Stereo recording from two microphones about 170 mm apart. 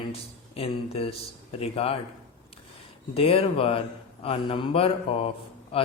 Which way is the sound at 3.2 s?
35° left (ahead or behind).